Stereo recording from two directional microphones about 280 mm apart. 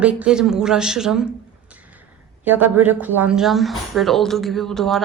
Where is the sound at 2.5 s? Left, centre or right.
Centre.